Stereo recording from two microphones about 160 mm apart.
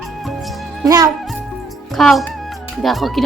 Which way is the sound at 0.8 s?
20° right (ahead or behind).